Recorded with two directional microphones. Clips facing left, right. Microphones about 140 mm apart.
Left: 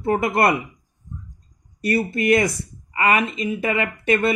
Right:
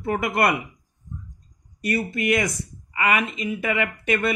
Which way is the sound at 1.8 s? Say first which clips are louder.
Left 4 dB; 35° left (ahead or behind).